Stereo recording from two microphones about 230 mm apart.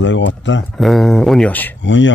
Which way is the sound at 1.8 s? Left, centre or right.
Left.